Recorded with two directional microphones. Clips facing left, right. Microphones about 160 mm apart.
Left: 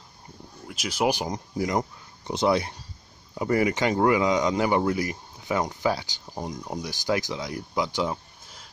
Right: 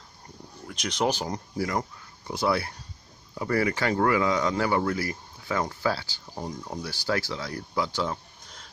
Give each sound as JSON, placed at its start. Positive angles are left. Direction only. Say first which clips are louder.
{"t": 0.7, "sound": "speech", "louder": "left 2 dB", "side_deg": 5}